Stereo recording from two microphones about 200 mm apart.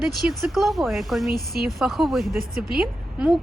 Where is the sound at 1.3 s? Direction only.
50° right (ahead or behind).